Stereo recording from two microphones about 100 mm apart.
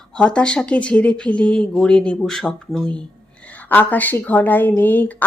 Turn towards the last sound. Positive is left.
turn(degrees=15)  # may be behind; listen again after turning